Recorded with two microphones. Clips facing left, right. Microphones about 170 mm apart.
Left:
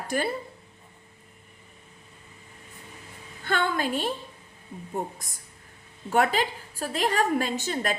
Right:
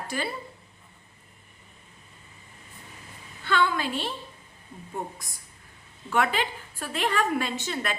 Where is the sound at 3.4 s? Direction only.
45° left (ahead or behind).